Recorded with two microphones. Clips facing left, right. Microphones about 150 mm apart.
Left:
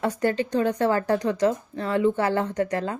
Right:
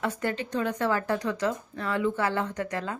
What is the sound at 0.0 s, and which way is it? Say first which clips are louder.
Speech: left 6 dB; 35° left (ahead or behind).